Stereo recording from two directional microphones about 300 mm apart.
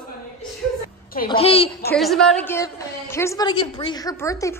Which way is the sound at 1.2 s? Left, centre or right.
Centre.